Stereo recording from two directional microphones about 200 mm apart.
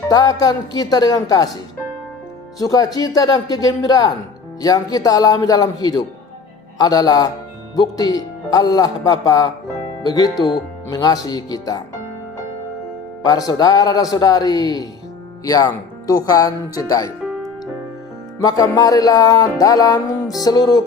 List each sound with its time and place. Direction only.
0.1 s music: 20° left (ahead or behind)
2.6 s music: 20° left (ahead or behind)
13.2 s music: 20° left (ahead or behind)
18.3 s music: 15° left (ahead or behind)